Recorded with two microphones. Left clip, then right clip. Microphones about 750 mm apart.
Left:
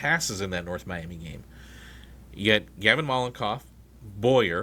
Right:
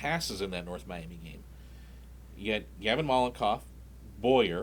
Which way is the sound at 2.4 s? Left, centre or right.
Left.